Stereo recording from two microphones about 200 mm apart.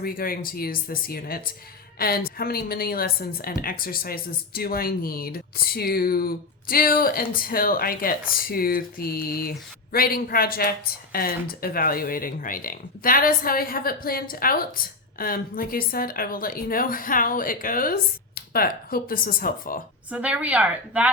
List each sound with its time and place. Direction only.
0.0 s a woman's voice: 45° left (ahead or behind)
20.1 s a woman's voice: 5° right (ahead or behind)